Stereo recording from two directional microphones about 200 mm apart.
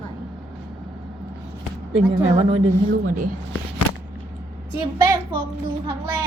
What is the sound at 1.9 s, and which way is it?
Speech, 30° right (ahead or behind).